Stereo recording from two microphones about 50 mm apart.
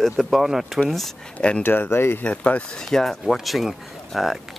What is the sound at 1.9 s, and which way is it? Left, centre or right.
Speech, left.